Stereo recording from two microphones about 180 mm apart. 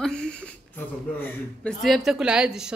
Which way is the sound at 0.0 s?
5° left (ahead or behind).